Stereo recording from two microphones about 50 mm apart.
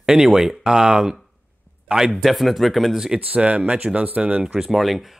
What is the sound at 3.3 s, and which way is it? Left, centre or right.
Speech, right.